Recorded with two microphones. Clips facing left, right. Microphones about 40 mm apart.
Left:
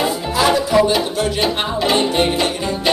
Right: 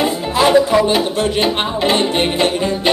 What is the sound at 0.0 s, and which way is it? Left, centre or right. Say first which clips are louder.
Music: right 2 dB; right.